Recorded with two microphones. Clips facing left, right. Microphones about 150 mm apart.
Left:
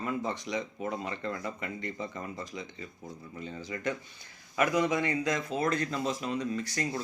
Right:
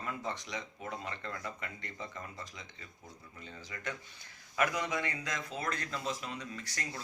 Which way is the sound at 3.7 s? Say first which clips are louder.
Left 8 dB; 20° left (ahead or behind).